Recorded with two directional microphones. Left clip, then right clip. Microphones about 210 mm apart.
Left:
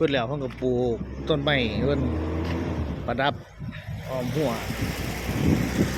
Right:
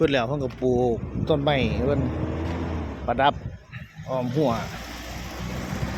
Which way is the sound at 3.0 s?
Centre (ahead or behind).